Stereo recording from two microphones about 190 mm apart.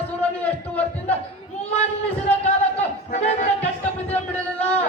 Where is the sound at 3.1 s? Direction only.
40° left (ahead or behind).